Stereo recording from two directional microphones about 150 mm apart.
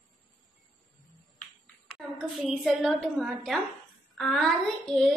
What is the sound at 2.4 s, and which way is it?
A woman's voice, 5° right (ahead or behind).